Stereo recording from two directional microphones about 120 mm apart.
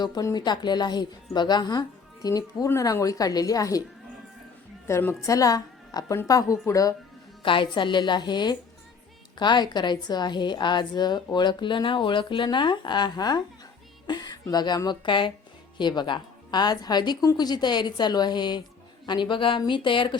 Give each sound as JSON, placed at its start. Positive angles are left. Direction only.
{"t": 0.0, "sound": "a woman's voice", "side_deg": 30}
{"t": 4.9, "sound": "a woman's voice", "side_deg": 20}
{"t": 7.4, "sound": "a woman's voice", "side_deg": 45}